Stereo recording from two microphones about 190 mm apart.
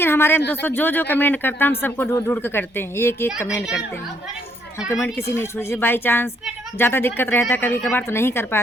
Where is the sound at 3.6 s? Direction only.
Centre (ahead or behind).